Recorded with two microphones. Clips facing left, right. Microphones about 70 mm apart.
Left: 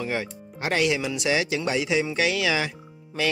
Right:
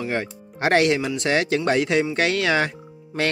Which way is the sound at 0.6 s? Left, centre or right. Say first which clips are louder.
Right 5 dB; right.